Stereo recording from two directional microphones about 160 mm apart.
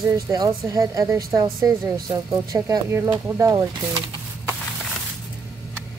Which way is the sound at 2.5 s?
20° right (ahead or behind).